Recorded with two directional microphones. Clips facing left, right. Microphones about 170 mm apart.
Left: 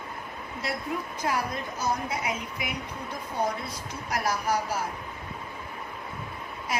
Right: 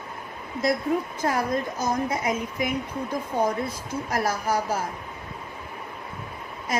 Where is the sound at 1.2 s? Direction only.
45° right (ahead or behind).